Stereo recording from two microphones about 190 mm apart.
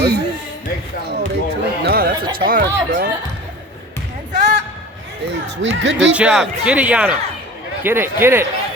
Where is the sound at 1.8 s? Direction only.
55° right (ahead or behind).